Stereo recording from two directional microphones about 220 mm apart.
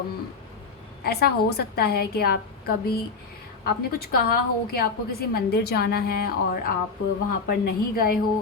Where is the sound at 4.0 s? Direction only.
45° left (ahead or behind).